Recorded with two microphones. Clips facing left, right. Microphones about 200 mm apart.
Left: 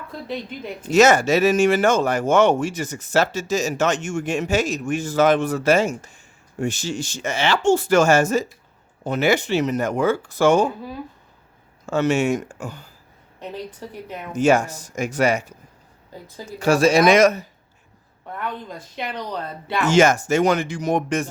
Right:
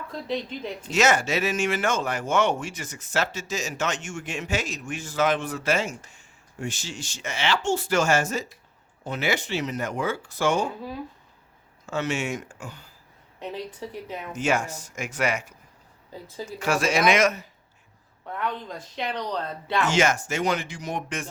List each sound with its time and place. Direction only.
0.1 s speech: 5° left (ahead or behind)
0.9 s a man's voice: 40° left (ahead or behind)
11.9 s speech: 40° left (ahead or behind)
13.4 s speech: centre (ahead or behind)
14.3 s a man's voice: 40° left (ahead or behind)
16.6 s a man's voice: 30° left (ahead or behind)
18.3 s speech: 5° left (ahead or behind)
19.9 s speech: 45° left (ahead or behind)